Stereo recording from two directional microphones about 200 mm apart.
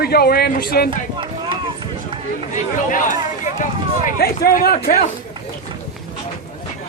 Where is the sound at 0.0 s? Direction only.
50° left (ahead or behind).